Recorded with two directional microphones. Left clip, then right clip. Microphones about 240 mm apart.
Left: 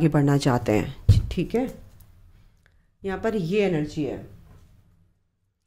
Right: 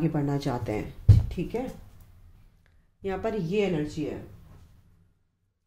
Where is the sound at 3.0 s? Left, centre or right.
Left.